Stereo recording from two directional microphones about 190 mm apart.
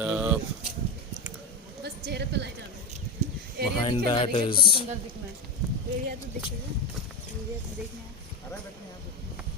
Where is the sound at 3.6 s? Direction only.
60° right (ahead or behind).